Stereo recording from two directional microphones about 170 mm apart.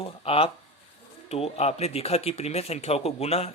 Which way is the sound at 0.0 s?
35° left (ahead or behind).